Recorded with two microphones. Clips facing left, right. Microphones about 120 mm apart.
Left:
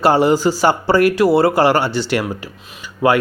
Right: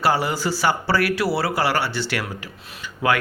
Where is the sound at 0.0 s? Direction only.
25° left (ahead or behind).